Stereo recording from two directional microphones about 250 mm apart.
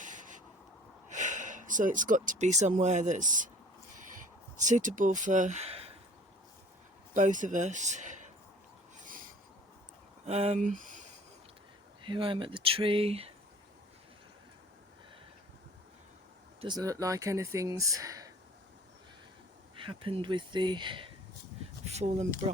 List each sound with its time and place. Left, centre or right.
0.0 s writing: right
1.1 s speech: right
4.5 s speech: right
7.1 s speech: right
9.0 s a sound: right
10.2 s speech: right
12.0 s speech: centre
16.6 s speech: centre
19.7 s speech: right